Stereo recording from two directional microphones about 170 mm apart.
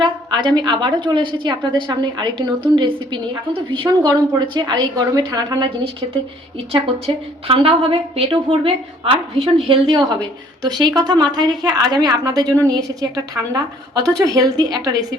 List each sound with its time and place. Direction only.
0.0 s a woman's voice: 25° right (ahead or behind)
7.4 s a woman's voice: 35° right (ahead or behind)